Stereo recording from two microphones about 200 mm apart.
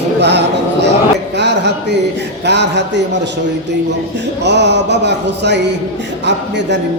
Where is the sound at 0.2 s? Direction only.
60° right (ahead or behind).